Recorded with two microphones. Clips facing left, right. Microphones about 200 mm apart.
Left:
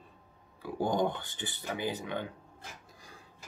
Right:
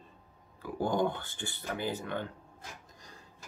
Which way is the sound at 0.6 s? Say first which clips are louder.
Even; 15° left (ahead or behind).